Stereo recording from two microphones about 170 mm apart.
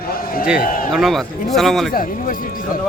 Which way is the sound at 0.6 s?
55° left (ahead or behind).